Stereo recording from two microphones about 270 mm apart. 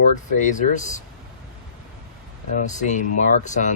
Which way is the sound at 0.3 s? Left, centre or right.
Left.